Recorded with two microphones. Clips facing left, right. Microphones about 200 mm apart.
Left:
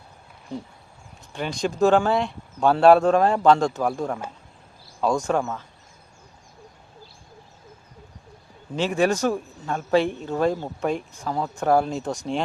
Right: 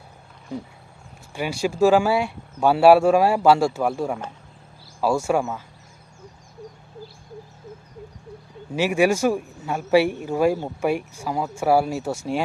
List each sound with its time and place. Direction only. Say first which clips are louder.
1.3 s a man's voice: right 2 dB; 10° right (ahead or behind)
8.7 s a man's voice: right 2 dB; 10° right (ahead or behind)